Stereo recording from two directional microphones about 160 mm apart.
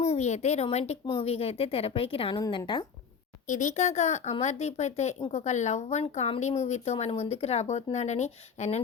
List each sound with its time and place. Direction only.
0.0 s a woman's voice: 45° left (ahead or behind); by 2.8 s 30° left (ahead or behind)
3.4 s speech: 50° left (ahead or behind)